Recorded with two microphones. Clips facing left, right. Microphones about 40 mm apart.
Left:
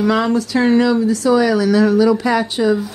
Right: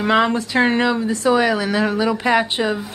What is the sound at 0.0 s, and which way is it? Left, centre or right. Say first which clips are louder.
Speech: left 1 dB; right.